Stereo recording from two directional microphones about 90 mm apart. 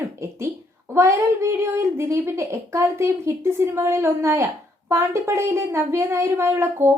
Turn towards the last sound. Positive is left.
turn(degrees=-25)  # may be behind; listen again after turning